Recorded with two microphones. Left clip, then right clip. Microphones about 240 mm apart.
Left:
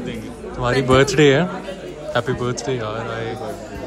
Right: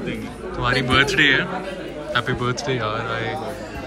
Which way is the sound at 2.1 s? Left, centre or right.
Centre.